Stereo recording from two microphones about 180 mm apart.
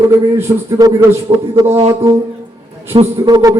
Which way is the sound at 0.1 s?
15° right (ahead or behind).